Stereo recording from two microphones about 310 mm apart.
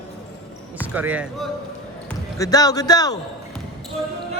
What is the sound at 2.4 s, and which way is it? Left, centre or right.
Speech, centre.